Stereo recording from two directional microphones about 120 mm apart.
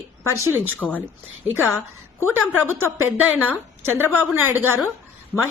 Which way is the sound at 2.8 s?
15° right (ahead or behind).